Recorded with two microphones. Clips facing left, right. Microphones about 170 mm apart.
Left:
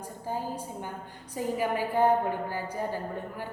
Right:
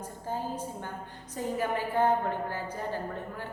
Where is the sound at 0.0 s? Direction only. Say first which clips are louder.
Left 1 dB; 10° left (ahead or behind).